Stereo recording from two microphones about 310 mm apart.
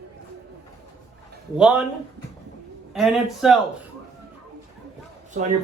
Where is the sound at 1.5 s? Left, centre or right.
Centre.